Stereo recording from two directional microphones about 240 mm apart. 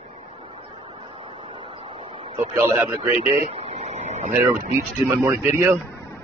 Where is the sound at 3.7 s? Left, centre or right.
Right.